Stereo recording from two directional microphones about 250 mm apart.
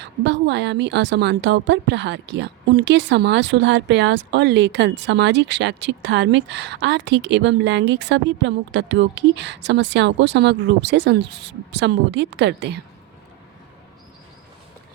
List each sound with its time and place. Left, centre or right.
0.0 s a woman's voice: right